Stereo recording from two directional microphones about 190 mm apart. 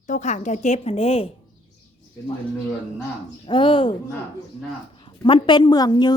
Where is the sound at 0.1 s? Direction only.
40° left (ahead or behind).